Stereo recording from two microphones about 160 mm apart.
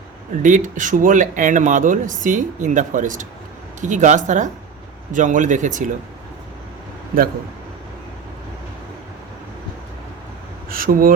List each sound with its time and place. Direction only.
0.4 s speech: 55° right (ahead or behind)
10.7 s speech: 65° right (ahead or behind)